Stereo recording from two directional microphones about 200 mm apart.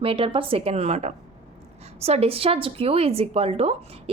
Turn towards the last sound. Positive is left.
turn(degrees=-30)  # may be behind; listen again after turning